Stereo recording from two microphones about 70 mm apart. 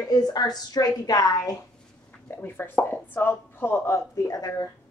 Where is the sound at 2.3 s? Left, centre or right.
Left.